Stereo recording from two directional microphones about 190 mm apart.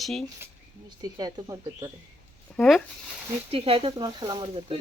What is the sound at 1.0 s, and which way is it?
Speech, 20° right (ahead or behind).